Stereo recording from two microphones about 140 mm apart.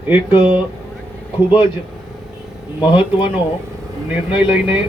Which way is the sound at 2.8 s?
35° left (ahead or behind).